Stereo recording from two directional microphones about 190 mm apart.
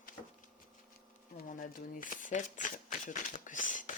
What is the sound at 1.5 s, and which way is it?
Speech, 45° left (ahead or behind).